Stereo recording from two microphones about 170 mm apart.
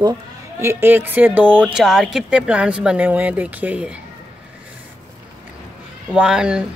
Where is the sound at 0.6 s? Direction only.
15° right (ahead or behind).